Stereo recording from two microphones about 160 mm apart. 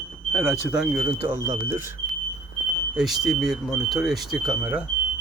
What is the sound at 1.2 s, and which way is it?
Speech, 20° right (ahead or behind).